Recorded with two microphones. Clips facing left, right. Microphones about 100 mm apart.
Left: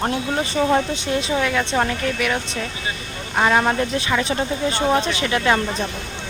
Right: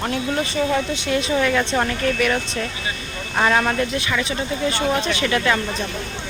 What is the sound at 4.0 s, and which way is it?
Speech, 25° left (ahead or behind).